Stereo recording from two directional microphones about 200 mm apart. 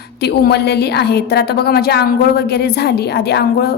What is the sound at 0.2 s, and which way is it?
A woman's voice, 55° left (ahead or behind).